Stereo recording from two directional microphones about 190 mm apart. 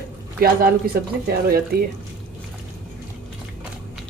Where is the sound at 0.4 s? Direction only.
50° right (ahead or behind).